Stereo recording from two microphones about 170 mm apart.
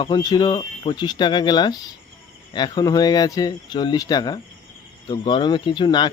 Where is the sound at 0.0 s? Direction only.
25° left (ahead or behind).